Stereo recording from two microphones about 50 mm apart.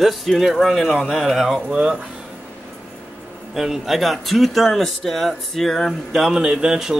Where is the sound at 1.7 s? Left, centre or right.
Centre.